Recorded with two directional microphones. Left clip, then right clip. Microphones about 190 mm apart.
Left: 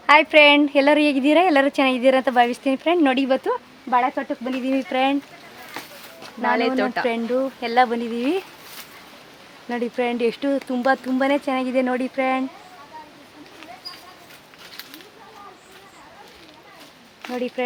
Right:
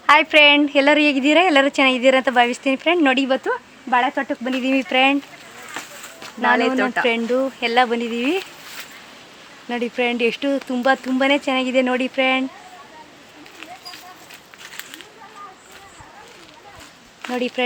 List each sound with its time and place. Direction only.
0.0 s a woman's voice: 5° right (ahead or behind)
3.8 s speech: 30° right (ahead or behind)
6.7 s speech: 15° left (ahead or behind)
7.1 s speech: 30° right (ahead or behind); by 8.4 s 5° right (ahead or behind)
9.6 s a woman's voice: 10° right (ahead or behind); by 12.5 s 25° right (ahead or behind)
17.2 s a sound: 30° right (ahead or behind)